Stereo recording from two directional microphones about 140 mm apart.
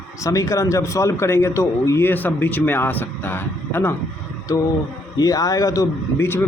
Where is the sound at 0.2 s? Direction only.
20° left (ahead or behind).